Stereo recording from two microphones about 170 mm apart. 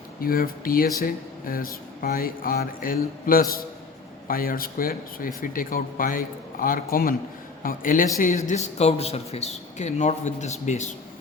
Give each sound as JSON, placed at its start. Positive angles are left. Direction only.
{"t": 0.2, "sound": "speech", "side_deg": 60}